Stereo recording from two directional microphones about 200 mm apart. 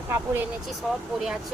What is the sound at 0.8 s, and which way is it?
Speech, centre (ahead or behind).